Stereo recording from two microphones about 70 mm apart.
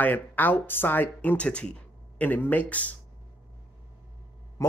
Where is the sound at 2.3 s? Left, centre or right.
Left.